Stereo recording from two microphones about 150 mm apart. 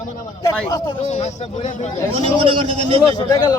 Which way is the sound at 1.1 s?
55° left (ahead or behind).